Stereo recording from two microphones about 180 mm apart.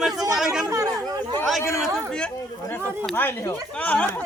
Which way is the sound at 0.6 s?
20° right (ahead or behind).